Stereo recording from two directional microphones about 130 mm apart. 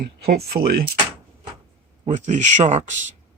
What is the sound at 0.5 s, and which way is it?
Speech, 35° right (ahead or behind).